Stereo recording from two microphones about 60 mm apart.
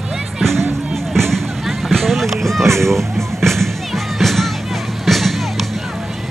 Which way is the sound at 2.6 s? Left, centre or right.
Right.